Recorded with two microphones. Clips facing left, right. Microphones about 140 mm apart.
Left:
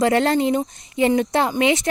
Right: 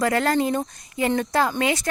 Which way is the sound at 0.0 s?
25° left (ahead or behind).